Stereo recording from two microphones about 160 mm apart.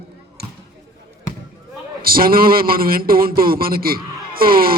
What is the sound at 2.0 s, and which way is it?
A man's voice, 65° right (ahead or behind).